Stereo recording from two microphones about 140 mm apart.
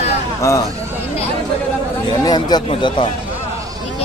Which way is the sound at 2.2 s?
30° left (ahead or behind).